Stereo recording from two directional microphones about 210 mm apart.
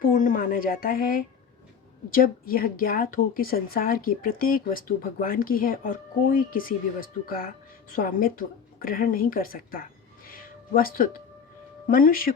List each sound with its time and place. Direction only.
0.0 s a woman's voice: 40° left (ahead or behind)
7.9 s a woman's voice: 40° left (ahead or behind)